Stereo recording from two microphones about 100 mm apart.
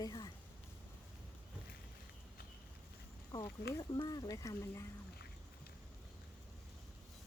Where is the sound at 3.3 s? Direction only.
45° left (ahead or behind).